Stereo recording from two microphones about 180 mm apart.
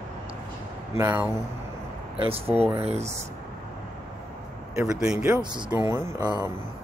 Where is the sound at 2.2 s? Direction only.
30° right (ahead or behind).